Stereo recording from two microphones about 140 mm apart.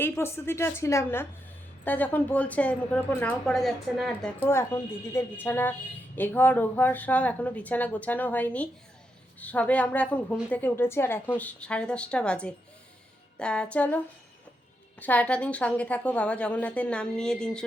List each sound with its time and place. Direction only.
0.0 s a woman's voice: 15° left (ahead or behind); by 4.3 s centre (ahead or behind)
4.4 s a woman's voice: 20° left (ahead or behind)